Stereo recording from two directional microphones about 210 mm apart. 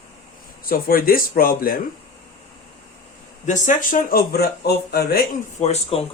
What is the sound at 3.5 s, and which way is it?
Speech, 40° left (ahead or behind).